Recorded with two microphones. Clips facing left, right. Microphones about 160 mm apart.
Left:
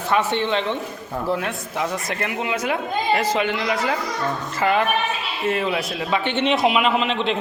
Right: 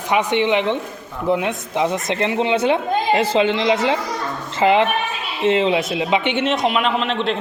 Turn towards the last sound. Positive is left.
turn(degrees=0)  # may be behind; listen again after turning